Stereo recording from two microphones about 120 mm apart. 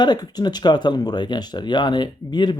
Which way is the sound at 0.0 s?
35° left (ahead or behind).